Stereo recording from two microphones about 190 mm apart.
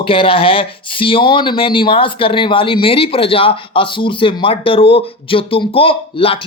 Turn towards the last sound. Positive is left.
turn(degrees=30)  # may be behind; listen again after turning